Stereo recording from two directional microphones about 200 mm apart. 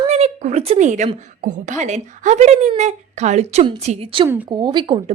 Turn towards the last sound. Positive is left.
turn(degrees=-25)  # may be behind; listen again after turning